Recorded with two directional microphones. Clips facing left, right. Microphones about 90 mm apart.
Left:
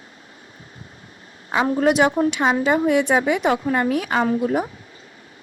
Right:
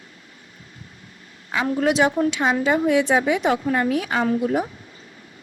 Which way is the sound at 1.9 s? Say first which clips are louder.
Left 1 dB; 55° left (ahead or behind).